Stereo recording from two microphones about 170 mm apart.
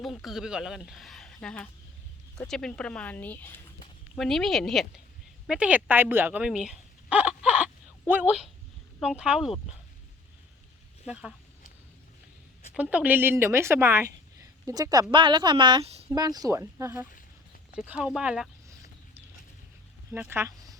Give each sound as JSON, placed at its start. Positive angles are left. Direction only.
{"t": 0.0, "sound": "a woman's voice", "side_deg": 0}
{"t": 11.0, "sound": "speech", "side_deg": -5}
{"t": 12.7, "sound": "a woman's voice", "side_deg": -10}
{"t": 16.1, "sound": "a woman's voice", "side_deg": -20}
{"t": 20.1, "sound": "speech", "side_deg": -15}